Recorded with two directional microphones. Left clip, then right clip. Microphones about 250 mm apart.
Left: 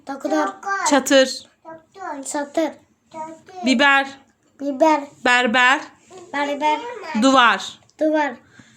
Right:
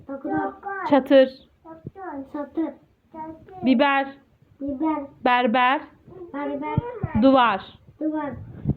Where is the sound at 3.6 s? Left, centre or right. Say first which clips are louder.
Left 4 dB; left.